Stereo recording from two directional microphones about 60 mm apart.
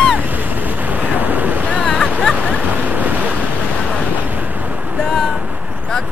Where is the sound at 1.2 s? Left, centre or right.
Right.